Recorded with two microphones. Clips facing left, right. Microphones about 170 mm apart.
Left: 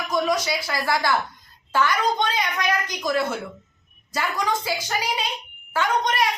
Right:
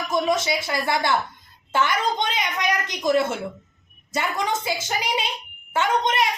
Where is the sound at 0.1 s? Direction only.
25° right (ahead or behind).